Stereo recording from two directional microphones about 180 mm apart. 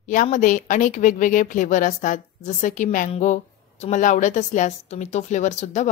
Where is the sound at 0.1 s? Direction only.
45° left (ahead or behind).